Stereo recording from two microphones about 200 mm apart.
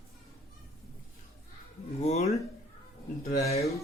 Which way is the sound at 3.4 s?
30° left (ahead or behind).